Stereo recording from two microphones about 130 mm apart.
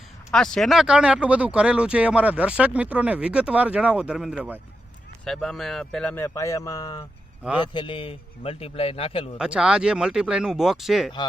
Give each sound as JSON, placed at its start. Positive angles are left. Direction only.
{"t": 0.3, "sound": "speech", "side_deg": 5}
{"t": 5.2, "sound": "speech", "side_deg": 5}
{"t": 6.2, "sound": "speech", "side_deg": 25}
{"t": 7.6, "sound": "a man's voice", "side_deg": 40}
{"t": 9.4, "sound": "speech", "side_deg": -5}